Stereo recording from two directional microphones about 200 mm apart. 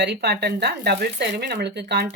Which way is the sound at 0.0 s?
60° right (ahead or behind).